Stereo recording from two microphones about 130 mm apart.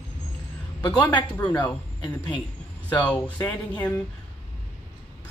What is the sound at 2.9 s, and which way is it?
Speech, 10° left (ahead or behind).